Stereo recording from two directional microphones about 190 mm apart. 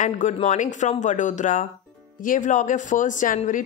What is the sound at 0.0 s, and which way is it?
Speech, 40° left (ahead or behind).